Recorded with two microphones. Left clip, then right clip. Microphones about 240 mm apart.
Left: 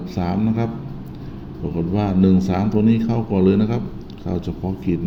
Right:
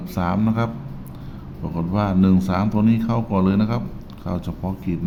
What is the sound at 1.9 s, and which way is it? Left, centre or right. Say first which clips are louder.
A man's voice: left 1 dB; centre.